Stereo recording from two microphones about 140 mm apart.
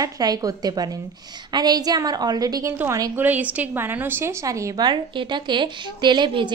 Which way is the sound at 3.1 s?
10° right (ahead or behind).